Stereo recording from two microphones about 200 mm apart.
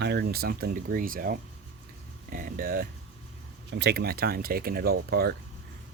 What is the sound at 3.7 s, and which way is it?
Speech, 55° right (ahead or behind).